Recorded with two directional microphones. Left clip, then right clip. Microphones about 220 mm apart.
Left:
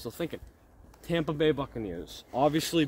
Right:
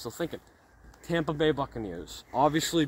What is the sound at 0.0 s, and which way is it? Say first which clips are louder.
Speech: right 1 dB; 10° left (ahead or behind).